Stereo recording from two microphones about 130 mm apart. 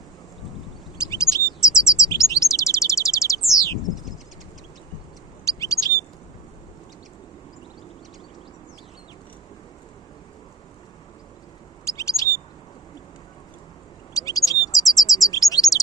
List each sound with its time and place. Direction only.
0.9 s chirp: 20° left (ahead or behind)
3.5 s a sound: 25° left (ahead or behind)
5.6 s chirp: 25° left (ahead or behind)
11.8 s chirp: 25° left (ahead or behind)
14.1 s chirp: 25° left (ahead or behind)